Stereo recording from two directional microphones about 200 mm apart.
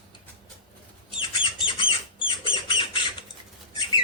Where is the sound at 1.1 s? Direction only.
25° left (ahead or behind).